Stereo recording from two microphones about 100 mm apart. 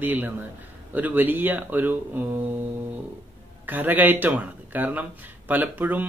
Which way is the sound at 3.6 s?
20° right (ahead or behind).